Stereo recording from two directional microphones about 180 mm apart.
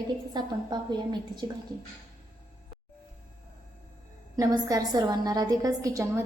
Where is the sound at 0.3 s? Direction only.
25° right (ahead or behind).